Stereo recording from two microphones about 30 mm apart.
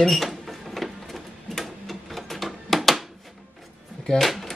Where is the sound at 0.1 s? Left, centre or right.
Centre.